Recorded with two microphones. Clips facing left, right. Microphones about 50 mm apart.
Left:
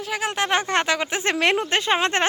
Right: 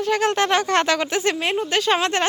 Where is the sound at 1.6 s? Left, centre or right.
Left.